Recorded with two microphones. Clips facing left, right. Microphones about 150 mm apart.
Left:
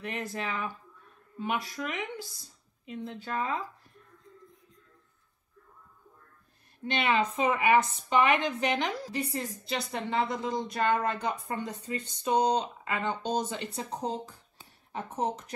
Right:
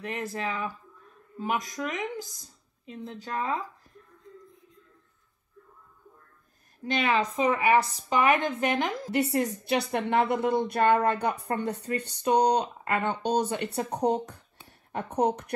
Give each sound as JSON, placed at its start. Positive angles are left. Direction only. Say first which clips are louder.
{"t": 0.0, "sound": "speech", "louder": "right 2 dB", "side_deg": -40}
{"t": 1.4, "sound": "speech", "louder": "right 2 dB", "side_deg": -40}
{"t": 6.9, "sound": "speech", "louder": "right 2 dB", "side_deg": -40}
{"t": 9.1, "sound": "speech", "louder": "right 8 dB", "side_deg": -75}